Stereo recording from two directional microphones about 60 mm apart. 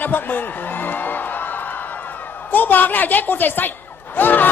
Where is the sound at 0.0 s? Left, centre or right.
Left.